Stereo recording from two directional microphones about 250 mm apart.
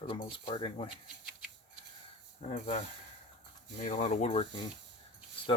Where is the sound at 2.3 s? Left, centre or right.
Left.